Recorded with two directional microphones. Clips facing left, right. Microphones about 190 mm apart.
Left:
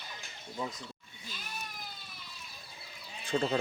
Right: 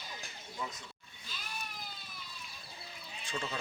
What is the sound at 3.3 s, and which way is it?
Speech, 40° left (ahead or behind).